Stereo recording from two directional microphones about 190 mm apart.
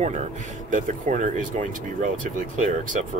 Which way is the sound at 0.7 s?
40° right (ahead or behind).